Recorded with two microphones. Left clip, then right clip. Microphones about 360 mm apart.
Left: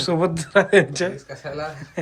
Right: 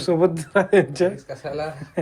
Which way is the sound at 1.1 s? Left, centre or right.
Right.